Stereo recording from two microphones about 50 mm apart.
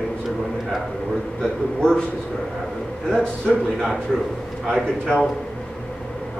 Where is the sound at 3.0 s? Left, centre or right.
Centre.